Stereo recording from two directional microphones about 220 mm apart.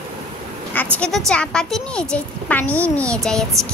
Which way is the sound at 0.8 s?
5° left (ahead or behind).